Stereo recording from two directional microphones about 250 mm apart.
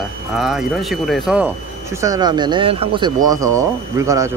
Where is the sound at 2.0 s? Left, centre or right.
Centre.